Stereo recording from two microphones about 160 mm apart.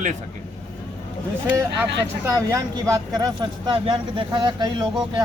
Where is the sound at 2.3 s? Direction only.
20° right (ahead or behind).